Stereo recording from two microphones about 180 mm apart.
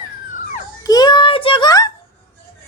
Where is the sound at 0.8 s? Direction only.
20° left (ahead or behind).